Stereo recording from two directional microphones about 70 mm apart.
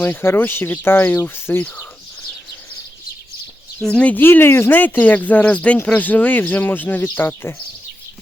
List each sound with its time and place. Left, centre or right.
0.0 s speech: left
1.5 s speech: left
3.8 s speech: centre
4.1 s speech: left